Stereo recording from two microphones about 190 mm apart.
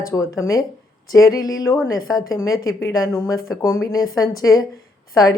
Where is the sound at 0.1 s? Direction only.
15° left (ahead or behind).